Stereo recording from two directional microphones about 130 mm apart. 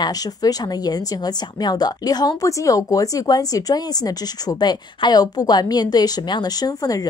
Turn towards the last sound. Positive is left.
turn(degrees=30)  # may be behind; listen again after turning